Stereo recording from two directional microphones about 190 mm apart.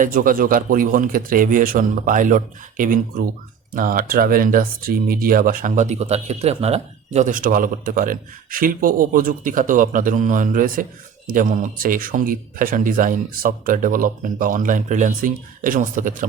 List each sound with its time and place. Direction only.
0.0 s speech: 45° right (ahead or behind)